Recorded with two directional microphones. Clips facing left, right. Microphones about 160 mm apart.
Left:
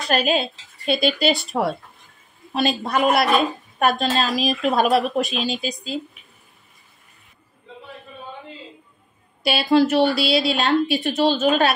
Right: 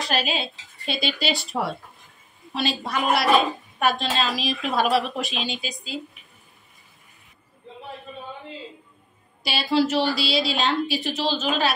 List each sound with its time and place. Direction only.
0.1 s speech: 50° left (ahead or behind)
9.4 s a woman's voice: 55° left (ahead or behind)